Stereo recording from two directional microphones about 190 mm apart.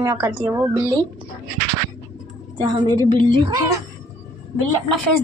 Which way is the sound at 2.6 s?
20° right (ahead or behind).